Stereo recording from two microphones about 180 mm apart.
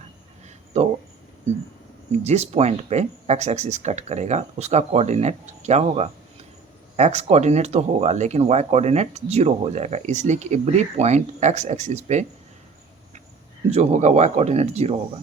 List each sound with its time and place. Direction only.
0.7 s speech: 35° right (ahead or behind)
2.2 s speech: 35° right (ahead or behind)
13.7 s speech: 35° right (ahead or behind)